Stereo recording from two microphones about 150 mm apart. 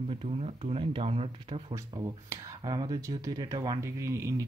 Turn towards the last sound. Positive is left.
turn(degrees=-20)  # may be behind; listen again after turning